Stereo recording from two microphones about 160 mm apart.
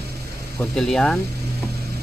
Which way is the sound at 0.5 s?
5° left (ahead or behind).